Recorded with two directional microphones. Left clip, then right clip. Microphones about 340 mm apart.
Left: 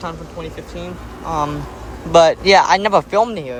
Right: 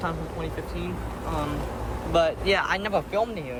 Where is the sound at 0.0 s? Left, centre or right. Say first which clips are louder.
Left 3 dB; centre.